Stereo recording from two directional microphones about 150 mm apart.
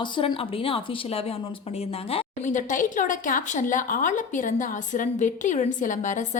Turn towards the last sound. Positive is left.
turn(degrees=60)  # may be behind; listen again after turning